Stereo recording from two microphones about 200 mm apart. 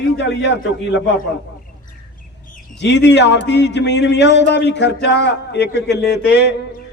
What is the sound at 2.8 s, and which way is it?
A man's voice, 60° left (ahead or behind).